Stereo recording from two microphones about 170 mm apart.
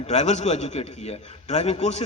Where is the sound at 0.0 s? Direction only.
40° left (ahead or behind).